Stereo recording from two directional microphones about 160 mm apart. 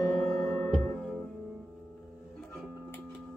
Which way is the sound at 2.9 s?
10° left (ahead or behind).